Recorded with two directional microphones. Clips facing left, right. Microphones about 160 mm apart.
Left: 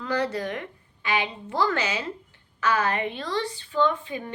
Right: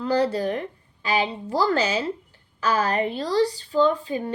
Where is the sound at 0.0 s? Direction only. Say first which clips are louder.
Right 5 dB; 30° right (ahead or behind).